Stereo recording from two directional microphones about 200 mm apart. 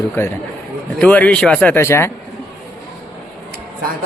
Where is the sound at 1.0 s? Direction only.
5° left (ahead or behind).